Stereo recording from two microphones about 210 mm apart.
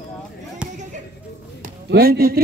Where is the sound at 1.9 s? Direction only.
45° right (ahead or behind).